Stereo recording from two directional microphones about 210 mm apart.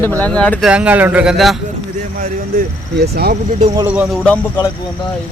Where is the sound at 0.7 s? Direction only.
5° right (ahead or behind).